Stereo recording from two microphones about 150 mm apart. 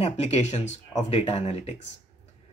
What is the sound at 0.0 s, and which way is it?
Speech, 45° left (ahead or behind).